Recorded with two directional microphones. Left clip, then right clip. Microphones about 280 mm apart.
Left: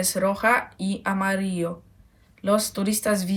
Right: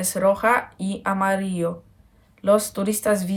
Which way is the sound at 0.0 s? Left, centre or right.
Centre.